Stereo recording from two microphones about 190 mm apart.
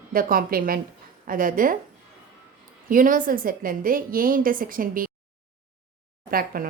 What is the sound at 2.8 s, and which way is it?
A woman's voice, 45° right (ahead or behind).